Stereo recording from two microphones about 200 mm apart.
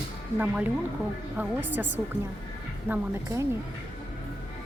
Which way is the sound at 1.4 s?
10° right (ahead or behind).